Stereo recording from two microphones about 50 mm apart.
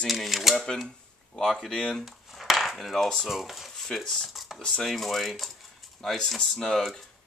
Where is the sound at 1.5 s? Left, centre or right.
Centre.